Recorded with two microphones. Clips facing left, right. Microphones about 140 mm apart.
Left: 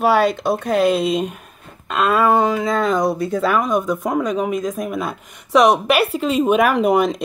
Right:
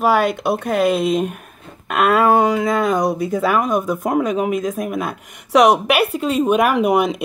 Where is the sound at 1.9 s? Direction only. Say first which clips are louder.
Right 2 dB; 60° right (ahead or behind).